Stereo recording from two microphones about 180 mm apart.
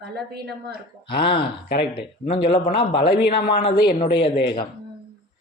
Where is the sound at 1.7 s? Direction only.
65° left (ahead or behind).